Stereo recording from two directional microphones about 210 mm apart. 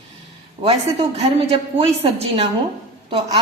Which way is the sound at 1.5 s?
25° right (ahead or behind).